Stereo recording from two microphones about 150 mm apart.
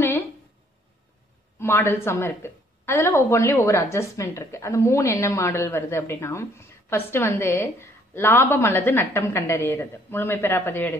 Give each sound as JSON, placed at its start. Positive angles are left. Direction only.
{"t": 1.6, "sound": "a woman's voice", "side_deg": 15}